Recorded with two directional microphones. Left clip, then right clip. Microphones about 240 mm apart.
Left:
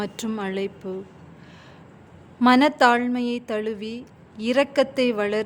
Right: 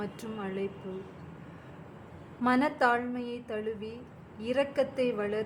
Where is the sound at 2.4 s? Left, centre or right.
Left.